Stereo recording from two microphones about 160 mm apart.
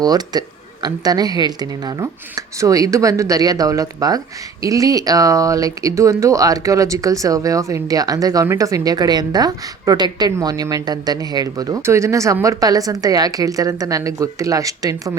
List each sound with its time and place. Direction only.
0.0 s speech: 25° right (ahead or behind)